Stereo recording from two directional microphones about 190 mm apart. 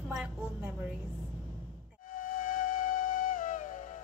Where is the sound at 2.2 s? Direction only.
45° left (ahead or behind).